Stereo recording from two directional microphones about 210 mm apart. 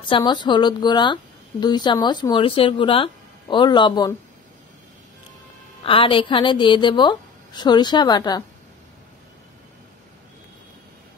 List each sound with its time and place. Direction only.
0.0 s a woman's voice: 20° left (ahead or behind)
5.9 s a woman's voice: 25° left (ahead or behind)